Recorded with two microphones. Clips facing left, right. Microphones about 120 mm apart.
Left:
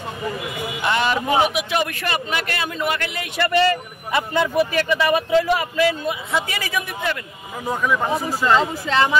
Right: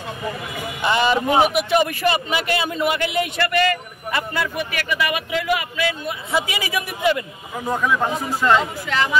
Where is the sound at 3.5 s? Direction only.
30° left (ahead or behind).